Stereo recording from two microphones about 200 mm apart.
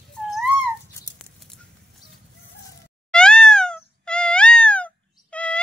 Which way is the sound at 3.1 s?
5° left (ahead or behind).